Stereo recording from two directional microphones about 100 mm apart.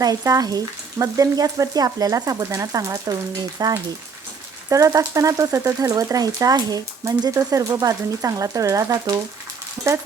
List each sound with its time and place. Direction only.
0.0 s frying: 40° right (ahead or behind)